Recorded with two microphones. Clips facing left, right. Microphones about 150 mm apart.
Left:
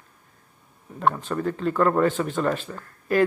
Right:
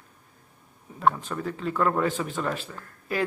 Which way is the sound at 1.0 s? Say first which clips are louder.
Left 2 dB; centre (ahead or behind).